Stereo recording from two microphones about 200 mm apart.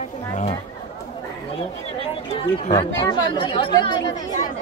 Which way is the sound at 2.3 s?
25° left (ahead or behind).